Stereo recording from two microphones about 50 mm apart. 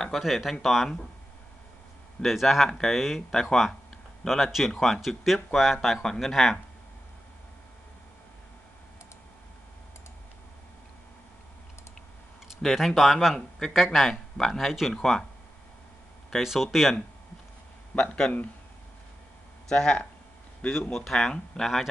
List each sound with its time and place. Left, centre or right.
0.2 s speech: centre
2.2 s speech: centre
3.2 s speech: centre
12.6 s speech: centre
15.0 s speech: centre
16.4 s speech: centre
17.9 s speech: centre
19.7 s speech: centre
21.0 s speech: centre